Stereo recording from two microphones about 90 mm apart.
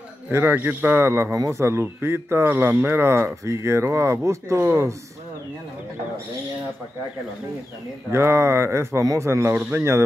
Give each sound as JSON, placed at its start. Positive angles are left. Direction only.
{"t": 0.3, "sound": "a man's voice", "side_deg": -25}
{"t": 8.1, "sound": "a man's voice", "side_deg": -30}